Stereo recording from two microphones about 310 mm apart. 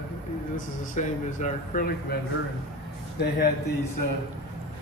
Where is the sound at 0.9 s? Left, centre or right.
Left.